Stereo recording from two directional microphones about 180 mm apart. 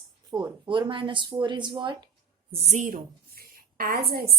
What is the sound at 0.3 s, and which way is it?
Speech, 25° right (ahead or behind).